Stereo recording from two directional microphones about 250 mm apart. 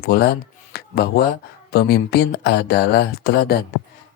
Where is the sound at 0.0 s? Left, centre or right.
Left.